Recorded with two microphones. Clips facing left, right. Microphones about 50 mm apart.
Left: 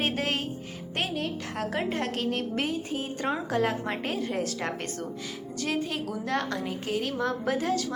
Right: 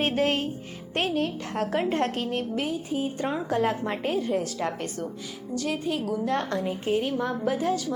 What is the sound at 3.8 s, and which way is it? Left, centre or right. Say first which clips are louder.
A woman's voice: right 3 dB; centre.